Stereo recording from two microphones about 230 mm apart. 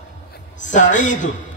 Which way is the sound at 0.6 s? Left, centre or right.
Left.